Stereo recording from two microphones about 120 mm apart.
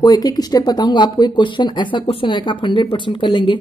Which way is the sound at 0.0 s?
35° left (ahead or behind).